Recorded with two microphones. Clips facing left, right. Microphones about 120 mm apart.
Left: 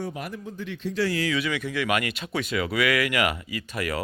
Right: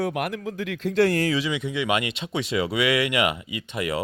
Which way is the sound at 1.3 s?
25° right (ahead or behind).